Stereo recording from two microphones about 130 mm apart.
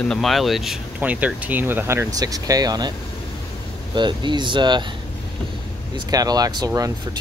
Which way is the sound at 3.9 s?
35° right (ahead or behind).